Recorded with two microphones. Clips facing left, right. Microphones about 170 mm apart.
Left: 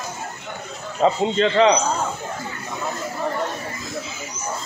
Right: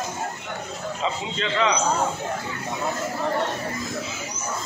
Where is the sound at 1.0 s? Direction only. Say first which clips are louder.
Left 11 dB; 40° left (ahead or behind).